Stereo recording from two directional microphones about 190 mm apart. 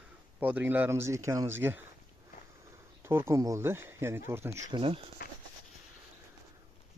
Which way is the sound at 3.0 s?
15° right (ahead or behind).